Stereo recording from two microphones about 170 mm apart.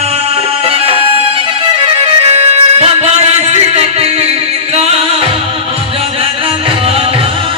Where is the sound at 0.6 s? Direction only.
35° right (ahead or behind).